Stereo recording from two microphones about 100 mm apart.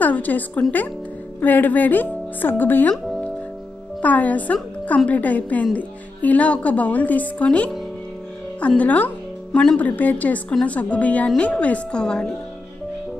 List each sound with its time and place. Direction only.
0.0 s a woman's voice: 15° left (ahead or behind)
4.0 s a woman's voice: 15° left (ahead or behind)
8.5 s music: 15° left (ahead or behind)
9.8 s a woman's voice: 15° left (ahead or behind)